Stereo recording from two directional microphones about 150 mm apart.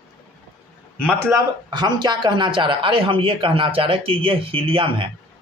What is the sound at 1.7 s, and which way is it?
A man's voice, 30° right (ahead or behind).